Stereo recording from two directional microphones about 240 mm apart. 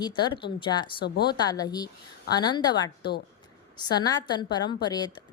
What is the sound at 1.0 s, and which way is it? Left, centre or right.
Speech, left.